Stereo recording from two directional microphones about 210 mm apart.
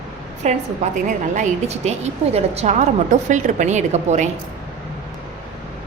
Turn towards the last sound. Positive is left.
turn(degrees=-35)  # may be behind; listen again after turning